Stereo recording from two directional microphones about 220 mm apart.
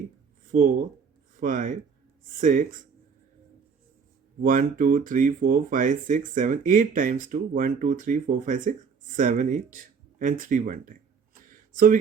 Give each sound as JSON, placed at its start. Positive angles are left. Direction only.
{"t": 0.5, "sound": "speech", "side_deg": -40}
{"t": 4.4, "sound": "speech", "side_deg": -40}